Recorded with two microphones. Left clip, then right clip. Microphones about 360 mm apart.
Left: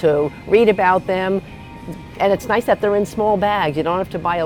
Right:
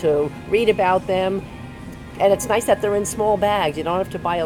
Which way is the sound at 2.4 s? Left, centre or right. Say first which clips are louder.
Left 2 dB; left.